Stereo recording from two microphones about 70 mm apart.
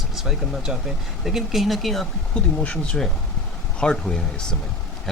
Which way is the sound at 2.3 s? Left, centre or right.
Centre.